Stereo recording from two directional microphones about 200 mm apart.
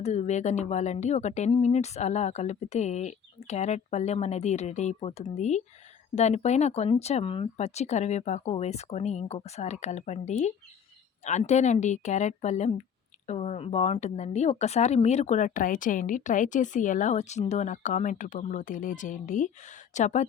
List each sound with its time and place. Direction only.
0.0 s speech: 35° left (ahead or behind)